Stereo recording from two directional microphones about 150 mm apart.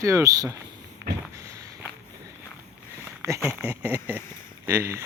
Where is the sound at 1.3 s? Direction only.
20° right (ahead or behind).